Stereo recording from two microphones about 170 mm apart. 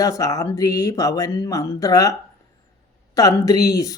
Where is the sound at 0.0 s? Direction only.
20° left (ahead or behind).